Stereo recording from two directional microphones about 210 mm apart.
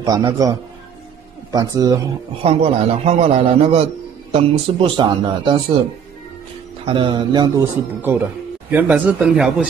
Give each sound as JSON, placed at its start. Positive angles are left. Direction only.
{"t": 0.0, "sound": "speech", "side_deg": -20}
{"t": 2.4, "sound": "speech", "side_deg": -30}
{"t": 6.9, "sound": "speech", "side_deg": -25}